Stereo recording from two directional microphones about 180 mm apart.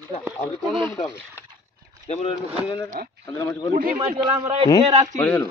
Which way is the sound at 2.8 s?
45° right (ahead or behind).